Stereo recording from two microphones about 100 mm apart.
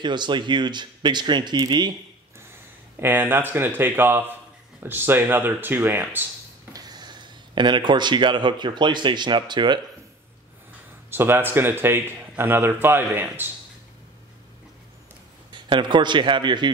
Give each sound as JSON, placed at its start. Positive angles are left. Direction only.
{"t": 0.0, "sound": "speech", "side_deg": -50}
{"t": 3.0, "sound": "speech", "side_deg": -20}
{"t": 6.7, "sound": "speech", "side_deg": -40}
{"t": 11.1, "sound": "speech", "side_deg": -20}
{"t": 15.5, "sound": "speech", "side_deg": -50}